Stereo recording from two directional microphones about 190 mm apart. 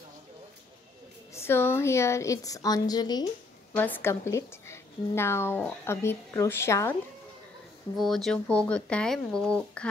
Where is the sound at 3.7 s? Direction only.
10° left (ahead or behind).